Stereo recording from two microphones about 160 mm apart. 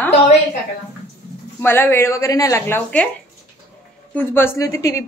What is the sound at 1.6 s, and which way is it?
A woman's voice, 15° left (ahead or behind).